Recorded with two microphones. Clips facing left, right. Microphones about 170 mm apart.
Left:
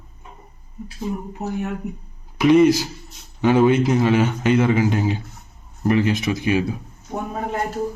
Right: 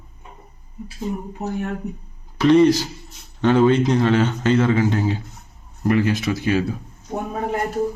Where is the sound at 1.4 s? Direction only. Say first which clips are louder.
Even; centre (ahead or behind).